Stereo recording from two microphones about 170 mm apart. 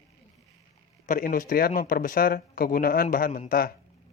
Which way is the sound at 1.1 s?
55° left (ahead or behind).